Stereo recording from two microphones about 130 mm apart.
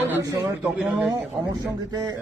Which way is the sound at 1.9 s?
30° right (ahead or behind).